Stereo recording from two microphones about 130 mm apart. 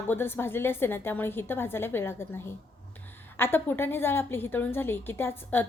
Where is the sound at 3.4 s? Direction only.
15° left (ahead or behind).